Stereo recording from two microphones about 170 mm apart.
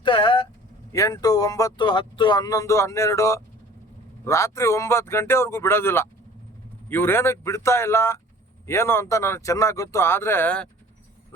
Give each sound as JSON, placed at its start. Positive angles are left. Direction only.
{"t": 0.0, "sound": "vehicle", "side_deg": 30}
{"t": 0.9, "sound": "speech", "side_deg": 20}